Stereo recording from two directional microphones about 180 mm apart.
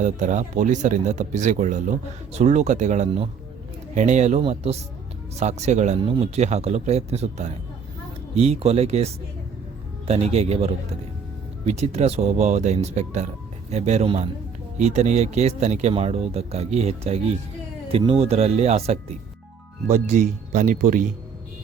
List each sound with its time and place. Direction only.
0.0 s speech: 40° right (ahead or behind)
10.1 s speech: 35° right (ahead or behind)